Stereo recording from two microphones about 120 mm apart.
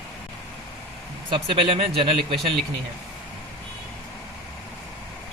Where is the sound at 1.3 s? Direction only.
45° right (ahead or behind).